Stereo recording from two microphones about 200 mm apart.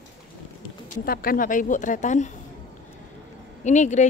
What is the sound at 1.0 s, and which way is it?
Speech, 45° left (ahead or behind).